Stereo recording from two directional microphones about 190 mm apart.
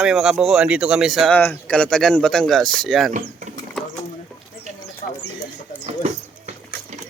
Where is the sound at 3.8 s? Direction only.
Centre (ahead or behind).